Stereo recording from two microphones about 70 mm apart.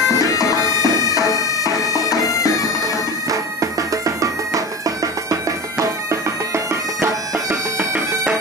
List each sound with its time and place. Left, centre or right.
0.1 s bagpipes: left
4.8 s bagpipes: right